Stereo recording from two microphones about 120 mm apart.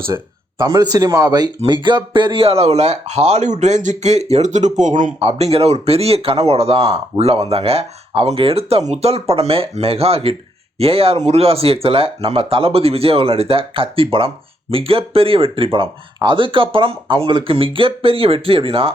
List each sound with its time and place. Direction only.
0.6 s speech: 30° right (ahead or behind); by 5.1 s 90° right
5.2 s speech: 55° right (ahead or behind)